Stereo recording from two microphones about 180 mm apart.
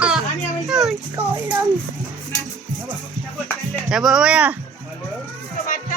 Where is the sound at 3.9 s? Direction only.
5° right (ahead or behind).